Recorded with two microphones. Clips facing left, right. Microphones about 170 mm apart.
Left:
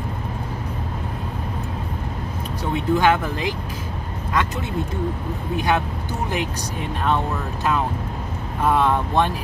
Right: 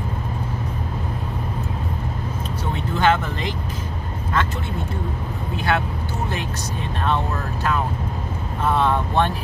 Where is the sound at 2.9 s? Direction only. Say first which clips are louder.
Right 1 dB; 10° left (ahead or behind).